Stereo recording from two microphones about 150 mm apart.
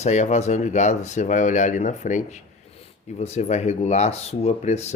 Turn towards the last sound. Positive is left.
turn(degrees=45)  # may be behind; listen again after turning